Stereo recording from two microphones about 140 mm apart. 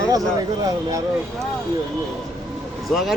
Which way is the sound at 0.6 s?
25° right (ahead or behind).